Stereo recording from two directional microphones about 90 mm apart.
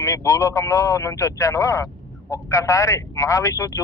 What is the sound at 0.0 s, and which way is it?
Speech, 30° left (ahead or behind).